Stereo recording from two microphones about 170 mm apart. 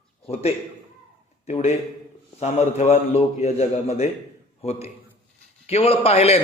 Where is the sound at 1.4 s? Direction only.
40° left (ahead or behind).